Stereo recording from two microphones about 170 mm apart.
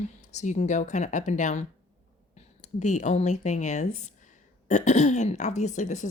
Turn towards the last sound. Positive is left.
turn(degrees=45)  # may be behind; listen again after turning